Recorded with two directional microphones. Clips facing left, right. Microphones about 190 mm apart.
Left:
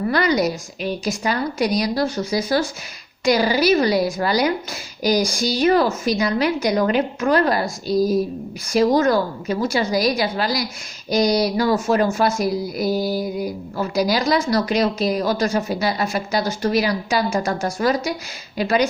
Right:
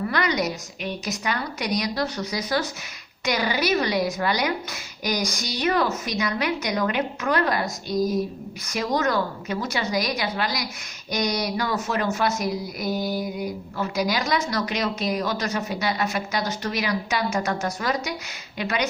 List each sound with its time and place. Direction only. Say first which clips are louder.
0.1 s speech: left 9 dB; 35° left (ahead or behind)